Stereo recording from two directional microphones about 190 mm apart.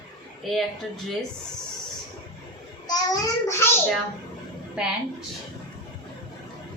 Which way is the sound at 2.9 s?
20° left (ahead or behind).